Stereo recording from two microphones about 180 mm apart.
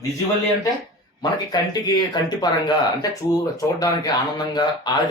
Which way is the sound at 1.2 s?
20° left (ahead or behind).